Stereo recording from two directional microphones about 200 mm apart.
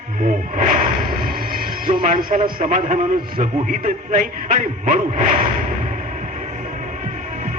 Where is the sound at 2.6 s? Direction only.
40° right (ahead or behind).